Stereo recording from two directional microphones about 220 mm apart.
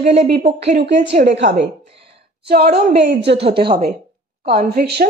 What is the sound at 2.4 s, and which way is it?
Speech, 45° right (ahead or behind).